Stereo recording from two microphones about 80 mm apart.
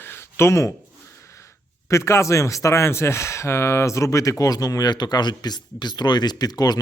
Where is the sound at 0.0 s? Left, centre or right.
Left.